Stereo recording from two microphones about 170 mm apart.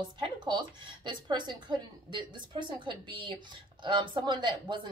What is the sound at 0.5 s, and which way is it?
Speech, 25° right (ahead or behind).